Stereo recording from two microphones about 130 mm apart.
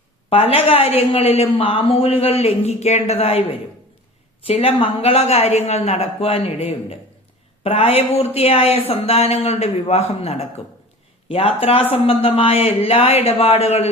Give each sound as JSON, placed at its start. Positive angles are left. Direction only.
{"t": 0.3, "sound": "speech", "side_deg": 50}
{"t": 4.4, "sound": "speech", "side_deg": 50}